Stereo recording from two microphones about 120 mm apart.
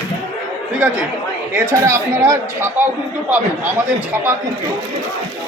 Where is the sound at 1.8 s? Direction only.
25° right (ahead or behind).